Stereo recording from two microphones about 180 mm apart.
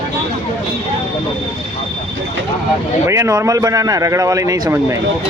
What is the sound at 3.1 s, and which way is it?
A man's voice, 15° right (ahead or behind).